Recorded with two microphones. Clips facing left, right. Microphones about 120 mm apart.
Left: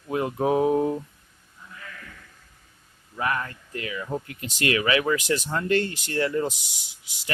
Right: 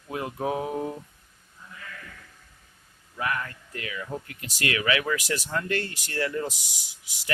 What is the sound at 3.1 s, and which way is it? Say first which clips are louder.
Speech: left 3 dB; 35° left (ahead or behind).